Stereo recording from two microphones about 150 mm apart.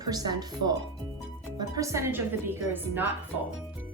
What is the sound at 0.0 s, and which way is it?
Speech, 25° right (ahead or behind).